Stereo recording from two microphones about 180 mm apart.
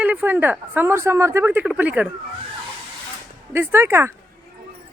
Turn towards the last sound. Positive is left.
turn(degrees=-15)  # may be behind; listen again after turning